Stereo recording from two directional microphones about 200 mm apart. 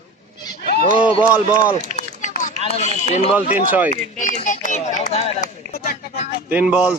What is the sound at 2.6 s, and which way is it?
Speech, 35° left (ahead or behind).